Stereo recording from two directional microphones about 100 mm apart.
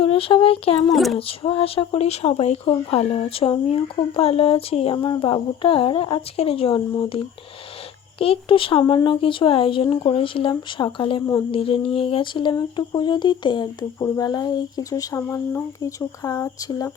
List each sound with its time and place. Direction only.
0.0 s speech: 70° left (ahead or behind)
0.9 s a child's voice: centre (ahead or behind)
1.3 s speech: 65° left (ahead or behind)
3.8 s speech: 60° left (ahead or behind)
8.2 s speech: 65° left (ahead or behind)
10.8 s a sound: 55° left (ahead or behind)
14.0 s speech: 40° left (ahead or behind)